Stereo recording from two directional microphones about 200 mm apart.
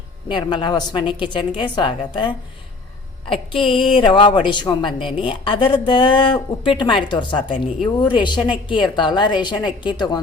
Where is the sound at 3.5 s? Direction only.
25° left (ahead or behind).